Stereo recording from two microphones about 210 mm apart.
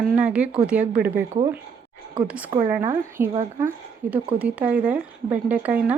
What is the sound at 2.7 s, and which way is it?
A woman's voice, 10° right (ahead or behind).